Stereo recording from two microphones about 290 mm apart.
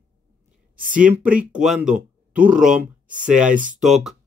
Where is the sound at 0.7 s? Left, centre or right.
Right.